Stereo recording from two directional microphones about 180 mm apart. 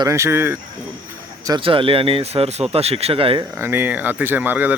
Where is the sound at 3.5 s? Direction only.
15° right (ahead or behind).